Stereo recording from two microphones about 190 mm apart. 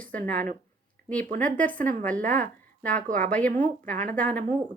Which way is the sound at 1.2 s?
40° right (ahead or behind).